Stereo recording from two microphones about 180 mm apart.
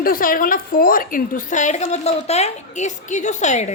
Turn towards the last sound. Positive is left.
turn(degrees=40)  # may be behind; listen again after turning